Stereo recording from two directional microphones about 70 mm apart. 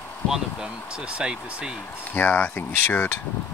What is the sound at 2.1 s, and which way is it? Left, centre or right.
Speech, left.